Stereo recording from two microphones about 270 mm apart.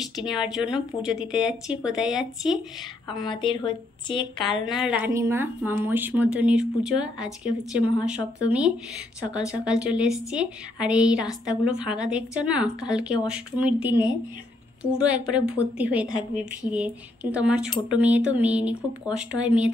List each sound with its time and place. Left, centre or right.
0.1 s a woman's voice: centre
3.3 s a woman's voice: centre
4.6 s a woman's voice: centre